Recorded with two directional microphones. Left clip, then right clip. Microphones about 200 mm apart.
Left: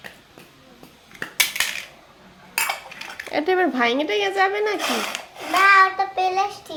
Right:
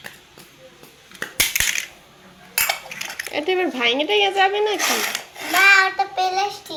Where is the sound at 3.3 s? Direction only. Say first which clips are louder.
Left 2 dB; 35° left (ahead or behind).